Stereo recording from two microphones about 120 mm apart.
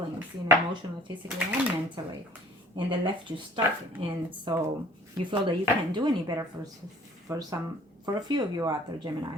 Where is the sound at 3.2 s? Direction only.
45° right (ahead or behind).